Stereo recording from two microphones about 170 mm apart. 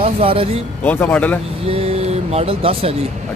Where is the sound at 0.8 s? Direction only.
10° left (ahead or behind).